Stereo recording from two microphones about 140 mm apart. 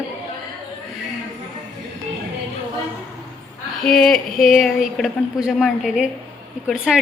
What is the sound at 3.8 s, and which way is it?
Speech, 5° left (ahead or behind).